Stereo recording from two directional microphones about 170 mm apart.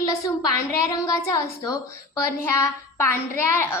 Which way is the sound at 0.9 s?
20° left (ahead or behind).